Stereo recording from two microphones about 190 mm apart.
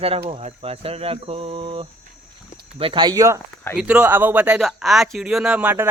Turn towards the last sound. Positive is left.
turn(degrees=-10)  # may be behind; listen again after turning